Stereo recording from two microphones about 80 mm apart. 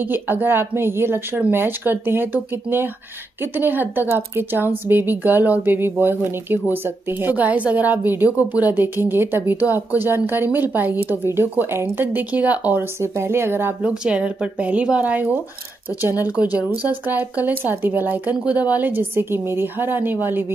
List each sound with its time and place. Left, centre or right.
0.0 s a woman's voice: right
13.0 s speech: right
13.8 s a woman's voice: centre